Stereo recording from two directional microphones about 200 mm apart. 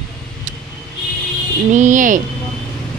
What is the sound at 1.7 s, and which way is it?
Speech, 40° right (ahead or behind).